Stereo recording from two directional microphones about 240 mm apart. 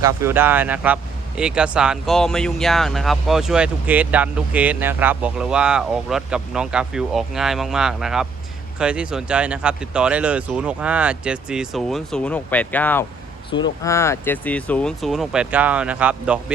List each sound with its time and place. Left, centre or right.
0.0 s speech: centre
13.5 s speech: centre